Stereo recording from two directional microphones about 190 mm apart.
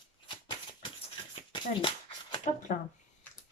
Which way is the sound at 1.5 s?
25° left (ahead or behind).